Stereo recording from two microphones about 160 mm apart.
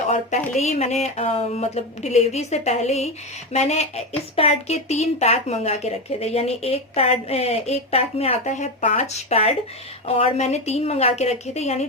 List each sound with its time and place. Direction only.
0.1 s a woman's voice: 45° left (ahead or behind)